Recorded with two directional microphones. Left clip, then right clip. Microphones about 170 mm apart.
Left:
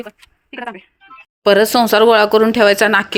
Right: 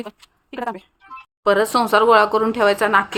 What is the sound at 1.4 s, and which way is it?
Speech, 25° left (ahead or behind).